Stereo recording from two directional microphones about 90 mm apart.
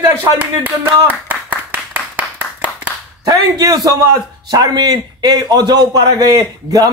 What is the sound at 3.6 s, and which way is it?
Speech, 35° right (ahead or behind).